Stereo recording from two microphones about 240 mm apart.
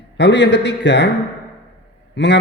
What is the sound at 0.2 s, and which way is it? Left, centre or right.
Speech, left.